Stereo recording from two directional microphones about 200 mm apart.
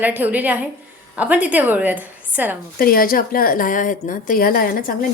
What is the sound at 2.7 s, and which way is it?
A woman's voice, 45° left (ahead or behind).